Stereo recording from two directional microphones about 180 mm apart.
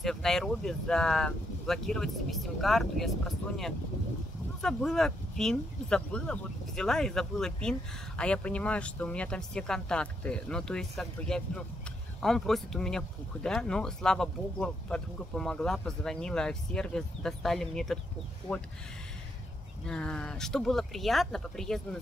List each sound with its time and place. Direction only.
0.0 s speech: 5° left (ahead or behind)
19.9 s speech: 5° left (ahead or behind)